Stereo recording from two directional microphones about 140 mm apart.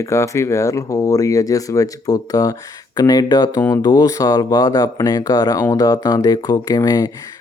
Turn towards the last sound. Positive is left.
turn(degrees=25)  # may be behind; listen again after turning